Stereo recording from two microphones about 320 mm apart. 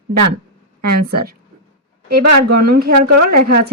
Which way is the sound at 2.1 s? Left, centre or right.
Right.